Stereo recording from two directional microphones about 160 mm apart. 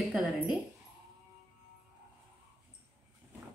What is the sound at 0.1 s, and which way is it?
Speech, centre (ahead or behind).